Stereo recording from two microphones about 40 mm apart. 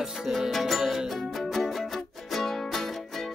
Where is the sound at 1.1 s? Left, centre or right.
Centre.